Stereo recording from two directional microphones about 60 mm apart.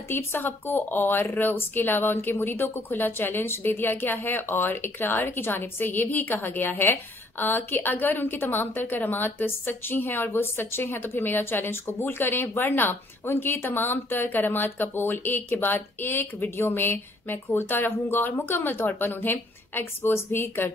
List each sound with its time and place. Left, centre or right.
0.1 s speech: left